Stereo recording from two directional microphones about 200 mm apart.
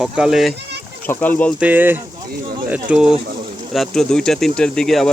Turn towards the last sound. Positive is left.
turn(degrees=0)  # may be behind; listen again after turning